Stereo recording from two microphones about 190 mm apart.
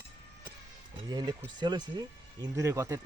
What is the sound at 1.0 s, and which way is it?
Speech, 20° right (ahead or behind).